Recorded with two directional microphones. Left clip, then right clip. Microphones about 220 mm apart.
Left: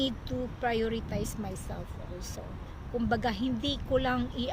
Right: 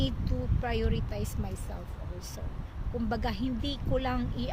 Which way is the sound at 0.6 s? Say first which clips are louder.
Left 3 dB; 15° left (ahead or behind).